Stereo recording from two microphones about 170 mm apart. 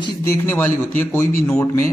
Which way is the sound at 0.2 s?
15° left (ahead or behind).